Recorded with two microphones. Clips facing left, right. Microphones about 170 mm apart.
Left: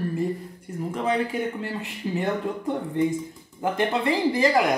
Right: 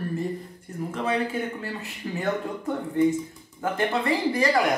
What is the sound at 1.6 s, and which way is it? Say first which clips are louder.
Speech: left 3 dB; 15° left (ahead or behind).